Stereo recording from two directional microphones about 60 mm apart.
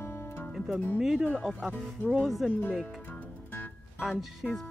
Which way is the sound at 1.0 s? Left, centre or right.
Centre.